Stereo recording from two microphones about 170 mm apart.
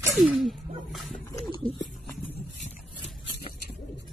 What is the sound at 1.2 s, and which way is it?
Dog, 20° left (ahead or behind).